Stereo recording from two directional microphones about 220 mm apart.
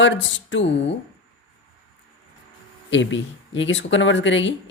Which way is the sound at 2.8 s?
55° left (ahead or behind).